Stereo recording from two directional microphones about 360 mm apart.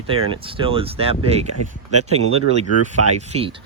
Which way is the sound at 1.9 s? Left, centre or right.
Right.